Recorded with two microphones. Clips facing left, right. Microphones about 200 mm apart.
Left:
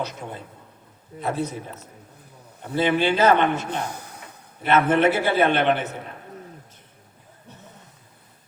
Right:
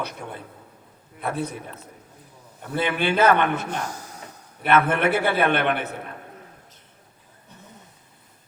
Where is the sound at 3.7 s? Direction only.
60° left (ahead or behind).